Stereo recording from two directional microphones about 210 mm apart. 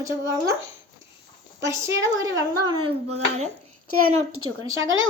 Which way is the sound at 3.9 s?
90° right.